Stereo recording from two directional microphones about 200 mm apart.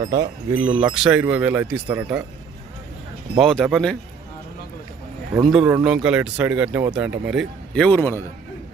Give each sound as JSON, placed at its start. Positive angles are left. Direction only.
{"t": 0.1, "sound": "speech", "side_deg": -15}
{"t": 3.3, "sound": "speech", "side_deg": 0}
{"t": 5.4, "sound": "speech", "side_deg": 0}